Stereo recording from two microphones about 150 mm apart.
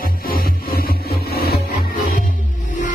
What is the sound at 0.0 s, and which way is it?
Music, 80° left.